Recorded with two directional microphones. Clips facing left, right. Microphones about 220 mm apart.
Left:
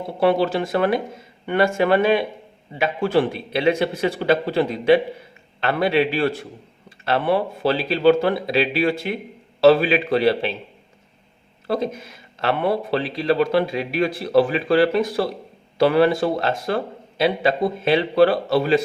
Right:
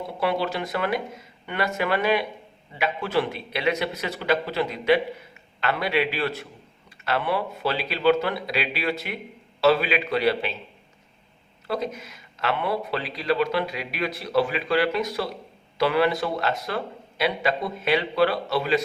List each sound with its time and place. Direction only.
0.2 s a man's voice: 30° left (ahead or behind)
11.7 s a man's voice: 30° left (ahead or behind)